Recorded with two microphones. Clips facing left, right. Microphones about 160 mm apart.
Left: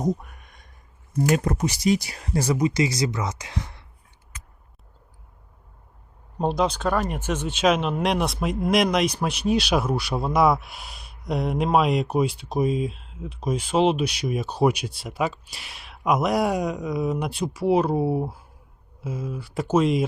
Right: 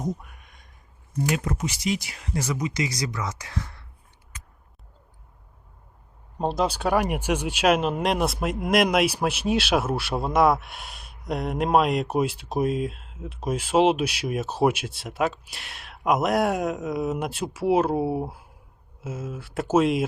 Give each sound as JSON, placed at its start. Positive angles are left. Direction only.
{"t": 0.0, "sound": "a sound", "side_deg": 40}
{"t": 1.4, "sound": "speech", "side_deg": 40}
{"t": 6.4, "sound": "speech", "side_deg": 0}